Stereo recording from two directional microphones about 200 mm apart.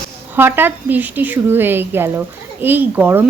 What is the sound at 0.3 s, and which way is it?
A woman's voice, 10° right (ahead or behind).